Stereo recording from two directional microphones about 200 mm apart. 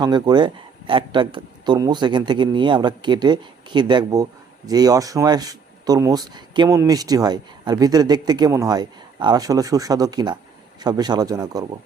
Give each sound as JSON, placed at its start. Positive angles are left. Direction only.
{"t": 0.0, "sound": "a man's voice", "side_deg": -20}